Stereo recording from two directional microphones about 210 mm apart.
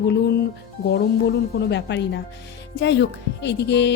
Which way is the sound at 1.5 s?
55° left (ahead or behind).